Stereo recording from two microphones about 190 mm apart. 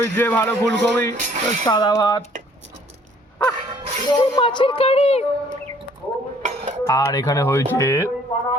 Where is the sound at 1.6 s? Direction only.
20° left (ahead or behind).